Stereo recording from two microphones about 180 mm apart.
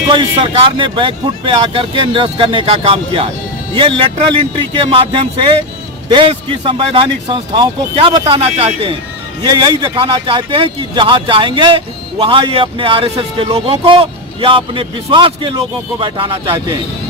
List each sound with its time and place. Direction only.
0.1 s a man's voice: 25° right (ahead or behind)